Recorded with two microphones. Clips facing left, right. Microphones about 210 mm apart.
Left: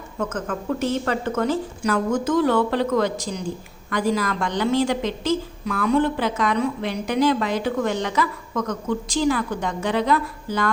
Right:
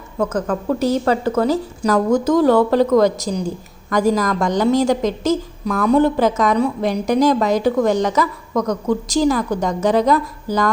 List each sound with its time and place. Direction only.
0.2 s a woman's voice: 35° right (ahead or behind)